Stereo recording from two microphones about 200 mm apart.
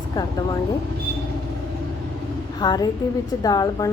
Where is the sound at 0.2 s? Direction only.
20° left (ahead or behind).